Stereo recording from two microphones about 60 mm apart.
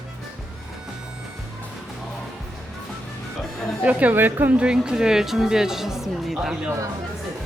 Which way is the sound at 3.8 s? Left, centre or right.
Right.